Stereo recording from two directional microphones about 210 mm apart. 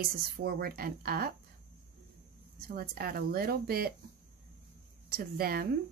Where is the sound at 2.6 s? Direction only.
45° right (ahead or behind).